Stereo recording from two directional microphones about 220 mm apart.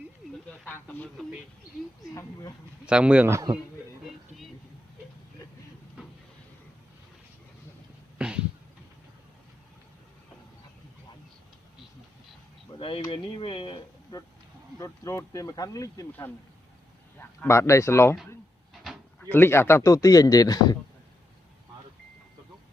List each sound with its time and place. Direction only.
0.6 s speech: 10° left (ahead or behind)
2.8 s a man's voice: 5° right (ahead or behind)
8.2 s cat: 5° right (ahead or behind)
12.8 s a sound: 25° left (ahead or behind)
14.8 s a man's voice: 15° left (ahead or behind)
18.7 s a sound: centre (ahead or behind)
19.2 s a man's voice: 10° left (ahead or behind)